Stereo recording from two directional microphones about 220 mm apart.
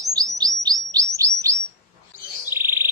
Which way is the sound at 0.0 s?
15° right (ahead or behind).